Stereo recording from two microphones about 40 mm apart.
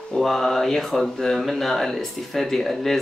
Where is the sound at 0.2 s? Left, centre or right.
Centre.